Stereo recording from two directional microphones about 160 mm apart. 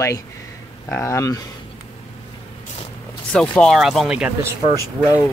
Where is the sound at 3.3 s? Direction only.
5° left (ahead or behind).